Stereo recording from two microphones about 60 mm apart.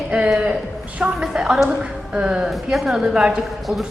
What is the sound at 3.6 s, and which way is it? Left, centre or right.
Speech, centre.